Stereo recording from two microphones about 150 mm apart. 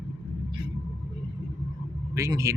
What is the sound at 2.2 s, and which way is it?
Speech, 20° right (ahead or behind).